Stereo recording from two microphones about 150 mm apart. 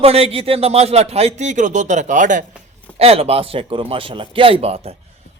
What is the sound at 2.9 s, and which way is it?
A man's voice, 40° right (ahead or behind).